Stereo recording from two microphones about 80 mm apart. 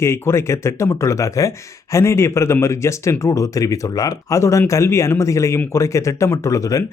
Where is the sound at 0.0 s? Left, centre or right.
Left.